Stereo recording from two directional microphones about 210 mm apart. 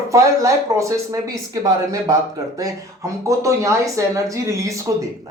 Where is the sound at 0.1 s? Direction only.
15° right (ahead or behind).